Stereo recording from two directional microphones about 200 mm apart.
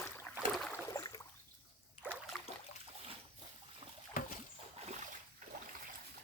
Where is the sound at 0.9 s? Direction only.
15° left (ahead or behind).